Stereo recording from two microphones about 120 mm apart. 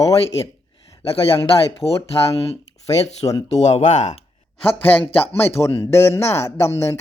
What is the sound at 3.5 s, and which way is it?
Speech, 70° left (ahead or behind).